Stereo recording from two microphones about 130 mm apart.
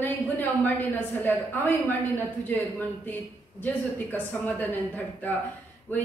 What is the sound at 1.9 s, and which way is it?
Speech, 15° left (ahead or behind).